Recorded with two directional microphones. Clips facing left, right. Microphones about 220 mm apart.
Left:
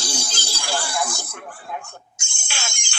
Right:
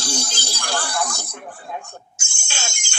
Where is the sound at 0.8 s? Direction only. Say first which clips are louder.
Even; 15° left (ahead or behind).